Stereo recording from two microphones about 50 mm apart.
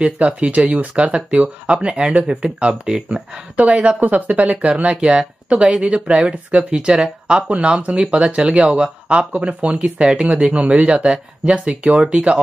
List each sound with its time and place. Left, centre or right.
0.0 s speech: right